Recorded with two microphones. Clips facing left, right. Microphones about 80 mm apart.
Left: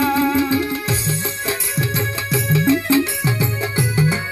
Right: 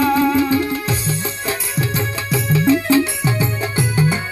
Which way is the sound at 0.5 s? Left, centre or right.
Centre.